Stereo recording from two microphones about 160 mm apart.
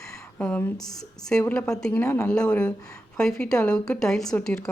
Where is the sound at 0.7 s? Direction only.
25° left (ahead or behind).